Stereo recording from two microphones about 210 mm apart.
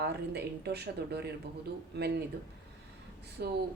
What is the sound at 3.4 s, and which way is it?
Speech, 45° right (ahead or behind).